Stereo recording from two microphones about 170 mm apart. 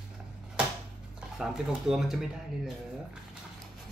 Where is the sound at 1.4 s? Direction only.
5° right (ahead or behind).